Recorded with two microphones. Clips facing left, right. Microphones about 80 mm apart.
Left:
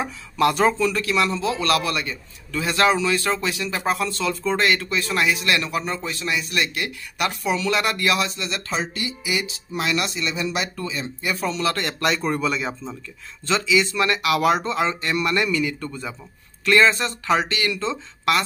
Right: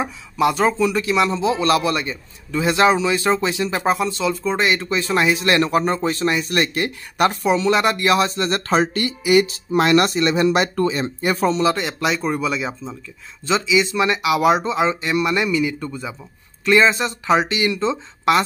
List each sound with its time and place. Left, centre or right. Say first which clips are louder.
0.5 s speech: right 1 dB; centre
0.7 s a man's voice: right 3 dB; centre; by 11.4 s right
11.4 s a man's voice: right 6 dB; right
11.7 s speech: right 2 dB; centre
13.5 s speech: right 2 dB; centre